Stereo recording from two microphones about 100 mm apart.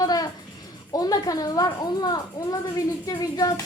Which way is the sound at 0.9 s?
40° left (ahead or behind).